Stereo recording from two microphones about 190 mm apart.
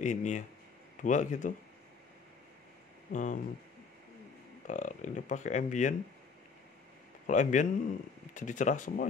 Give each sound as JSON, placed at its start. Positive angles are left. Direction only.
{"t": 0.0, "sound": "speech", "side_deg": 40}
{"t": 3.1, "sound": "speech", "side_deg": 40}
{"t": 4.6, "sound": "speech", "side_deg": 40}
{"t": 7.2, "sound": "speech", "side_deg": 40}